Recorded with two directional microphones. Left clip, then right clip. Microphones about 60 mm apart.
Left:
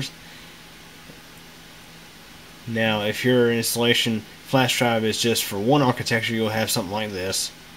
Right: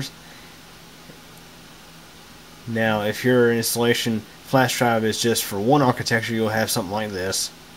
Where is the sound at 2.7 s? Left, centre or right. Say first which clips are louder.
Right 1 dB; centre.